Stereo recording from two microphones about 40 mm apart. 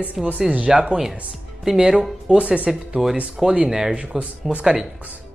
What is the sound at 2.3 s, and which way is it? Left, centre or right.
Speech, right.